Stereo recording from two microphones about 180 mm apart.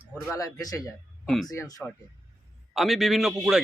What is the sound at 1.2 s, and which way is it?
Speech, centre (ahead or behind).